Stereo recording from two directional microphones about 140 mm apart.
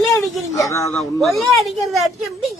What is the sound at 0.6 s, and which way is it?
Speech, 20° left (ahead or behind).